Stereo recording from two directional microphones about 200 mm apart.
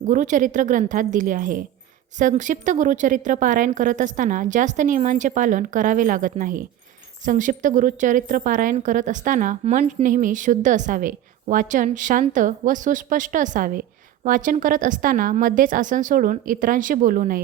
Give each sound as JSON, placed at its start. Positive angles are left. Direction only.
{"t": 0.0, "sound": "a woman's voice", "side_deg": -40}